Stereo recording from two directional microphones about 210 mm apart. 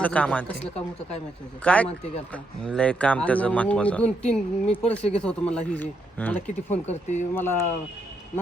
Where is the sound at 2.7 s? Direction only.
5° left (ahead or behind).